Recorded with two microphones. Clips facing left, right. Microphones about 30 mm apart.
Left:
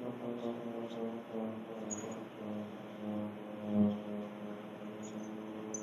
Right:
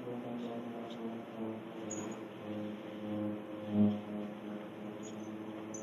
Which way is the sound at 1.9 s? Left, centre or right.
Right.